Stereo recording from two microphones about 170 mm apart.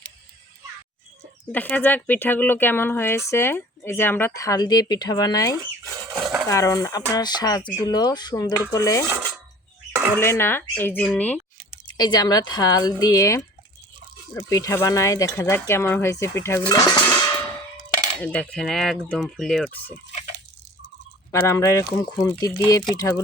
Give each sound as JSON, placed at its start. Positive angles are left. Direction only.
{"t": 1.5, "sound": "speech", "side_deg": 10}
{"t": 6.1, "sound": "a sound", "side_deg": 0}
{"t": 6.5, "sound": "speech", "side_deg": 20}
{"t": 9.0, "sound": "a sound", "side_deg": -10}
{"t": 10.2, "sound": "speech", "side_deg": 15}
{"t": 11.9, "sound": "speech", "side_deg": 25}
{"t": 14.5, "sound": "speech", "side_deg": 20}
{"t": 18.2, "sound": "a sound", "side_deg": 10}
{"t": 21.3, "sound": "speech", "side_deg": 15}